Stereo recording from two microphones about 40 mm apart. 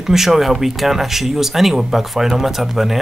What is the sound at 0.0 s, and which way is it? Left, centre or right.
Speech, centre.